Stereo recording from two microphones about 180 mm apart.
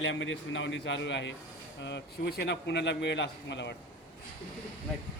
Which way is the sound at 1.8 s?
70° left (ahead or behind).